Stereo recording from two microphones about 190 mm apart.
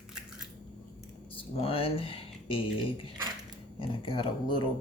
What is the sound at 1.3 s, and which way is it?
Speech, 30° left (ahead or behind).